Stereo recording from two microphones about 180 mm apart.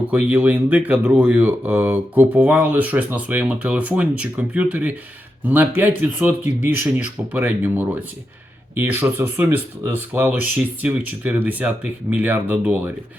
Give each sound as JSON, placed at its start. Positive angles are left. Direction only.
{"t": 0.1, "sound": "speech", "side_deg": -10}